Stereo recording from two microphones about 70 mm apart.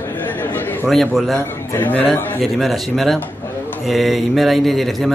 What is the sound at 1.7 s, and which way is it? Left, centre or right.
Speech, left.